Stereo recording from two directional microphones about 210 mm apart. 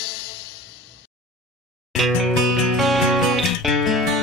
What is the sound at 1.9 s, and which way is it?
Music, centre (ahead or behind).